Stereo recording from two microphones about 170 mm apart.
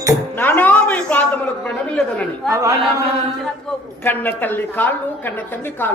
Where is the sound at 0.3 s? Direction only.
10° left (ahead or behind).